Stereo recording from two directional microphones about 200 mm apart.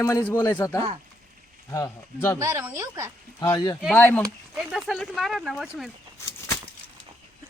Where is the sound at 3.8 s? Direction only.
5° left (ahead or behind).